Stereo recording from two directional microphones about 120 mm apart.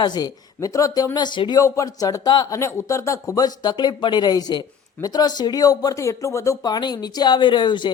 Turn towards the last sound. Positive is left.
turn(degrees=40)  # may be behind; listen again after turning